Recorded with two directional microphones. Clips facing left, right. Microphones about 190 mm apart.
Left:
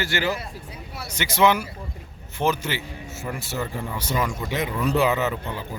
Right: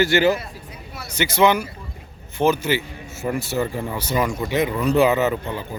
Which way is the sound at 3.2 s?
25° right (ahead or behind).